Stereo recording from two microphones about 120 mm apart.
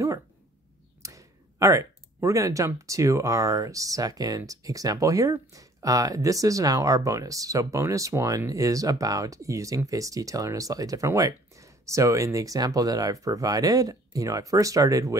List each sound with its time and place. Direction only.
1.0 s speech: 25° right (ahead or behind)